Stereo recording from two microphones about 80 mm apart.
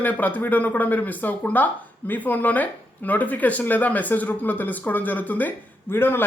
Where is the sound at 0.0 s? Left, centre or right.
Left.